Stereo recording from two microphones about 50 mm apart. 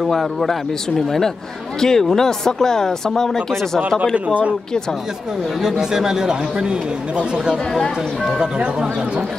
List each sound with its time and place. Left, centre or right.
0.0 s speech: centre
5.6 s speech: centre